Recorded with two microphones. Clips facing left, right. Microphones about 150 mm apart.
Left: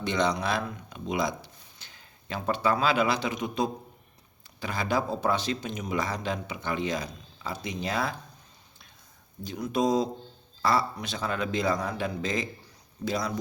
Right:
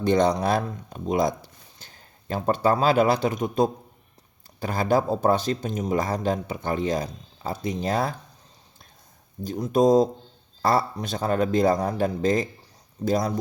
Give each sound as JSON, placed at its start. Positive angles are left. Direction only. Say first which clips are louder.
{"t": 0.0, "sound": "speech", "louder": "right 7 dB", "side_deg": -50}
{"t": 9.4, "sound": "speech", "louder": "right 7 dB", "side_deg": -45}